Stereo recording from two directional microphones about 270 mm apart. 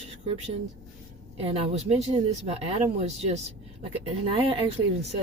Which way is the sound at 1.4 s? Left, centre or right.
Right.